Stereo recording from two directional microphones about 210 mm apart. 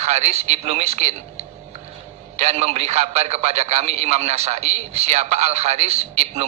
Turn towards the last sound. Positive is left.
turn(degrees=-30)  # may be behind; listen again after turning